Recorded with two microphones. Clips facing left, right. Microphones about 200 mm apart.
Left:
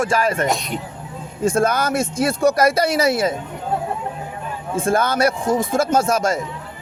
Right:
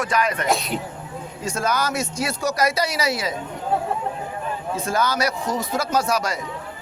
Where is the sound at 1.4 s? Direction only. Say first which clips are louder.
Left 6 dB; 55° left (ahead or behind).